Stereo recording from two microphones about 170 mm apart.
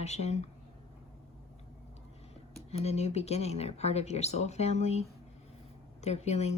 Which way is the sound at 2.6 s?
40° left (ahead or behind).